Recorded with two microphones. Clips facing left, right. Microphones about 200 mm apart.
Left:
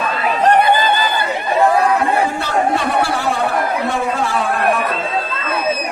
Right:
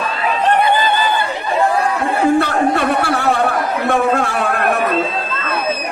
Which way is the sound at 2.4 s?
60° right (ahead or behind).